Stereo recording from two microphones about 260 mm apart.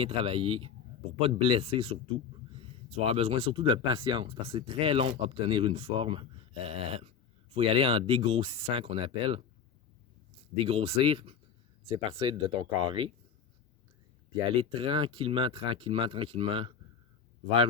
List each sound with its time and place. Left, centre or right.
0.0 s speech: right
10.7 s speech: right
14.5 s speech: right